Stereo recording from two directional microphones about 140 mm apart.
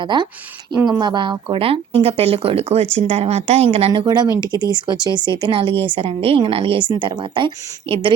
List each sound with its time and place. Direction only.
0.0 s speech: 35° right (ahead or behind)
4.0 s speech: 30° right (ahead or behind)